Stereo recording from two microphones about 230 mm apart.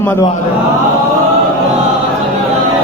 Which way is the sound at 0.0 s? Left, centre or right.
Centre.